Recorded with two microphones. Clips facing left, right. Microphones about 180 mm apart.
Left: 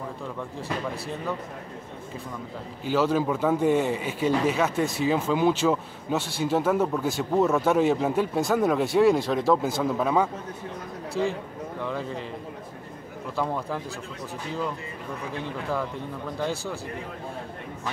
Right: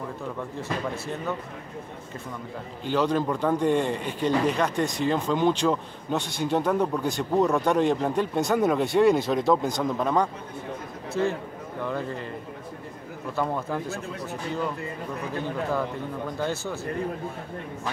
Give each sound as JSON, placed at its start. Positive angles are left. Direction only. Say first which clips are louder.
{"t": 0.6, "sound": "speech", "louder": "even", "side_deg": 0}
{"t": 2.8, "sound": "speech", "louder": "left 1 dB", "side_deg": 5}
{"t": 13.4, "sound": "speech", "louder": "right 1 dB", "side_deg": 0}
{"t": 16.3, "sound": "speech", "louder": "left 1 dB", "side_deg": 0}